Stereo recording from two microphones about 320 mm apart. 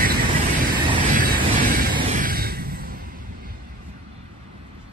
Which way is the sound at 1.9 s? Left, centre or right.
Right.